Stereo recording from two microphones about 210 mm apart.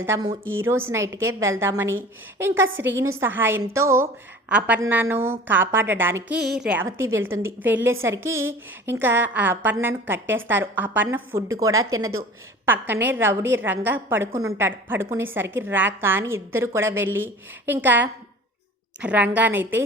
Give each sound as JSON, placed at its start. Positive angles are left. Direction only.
{"t": 0.0, "sound": "a woman's voice", "side_deg": -15}